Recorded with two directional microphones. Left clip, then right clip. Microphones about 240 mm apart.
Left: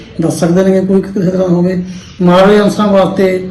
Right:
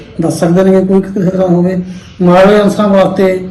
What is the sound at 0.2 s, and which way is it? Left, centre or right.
A man's voice, centre.